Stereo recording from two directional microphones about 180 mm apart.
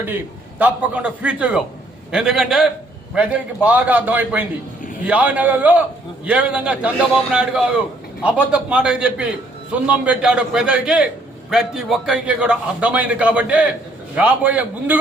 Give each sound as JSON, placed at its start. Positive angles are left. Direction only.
{"t": 0.6, "sound": "a man's voice", "side_deg": -5}